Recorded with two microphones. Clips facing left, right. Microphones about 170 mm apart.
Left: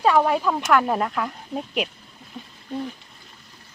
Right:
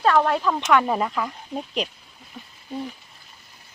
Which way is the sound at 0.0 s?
10° left (ahead or behind).